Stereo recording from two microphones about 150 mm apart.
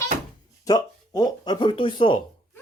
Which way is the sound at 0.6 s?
25° left (ahead or behind).